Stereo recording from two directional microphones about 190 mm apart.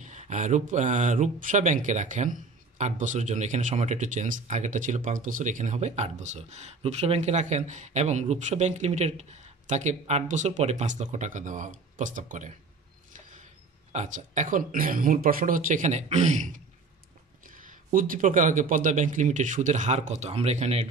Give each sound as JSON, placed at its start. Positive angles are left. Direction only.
{"t": 0.0, "sound": "speech", "side_deg": -40}
{"t": 13.9, "sound": "speech", "side_deg": -40}